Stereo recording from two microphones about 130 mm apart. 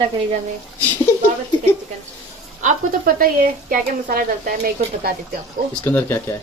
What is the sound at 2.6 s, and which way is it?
A woman's voice, 85° right.